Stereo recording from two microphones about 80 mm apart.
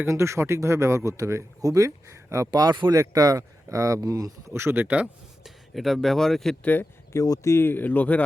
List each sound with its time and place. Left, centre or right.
0.1 s speech: right
2.5 s speech: right
2.9 s speech: right
4.5 s speech: right
5.4 s speech: centre
6.6 s speech: left
7.1 s speech: left; by 8.2 s centre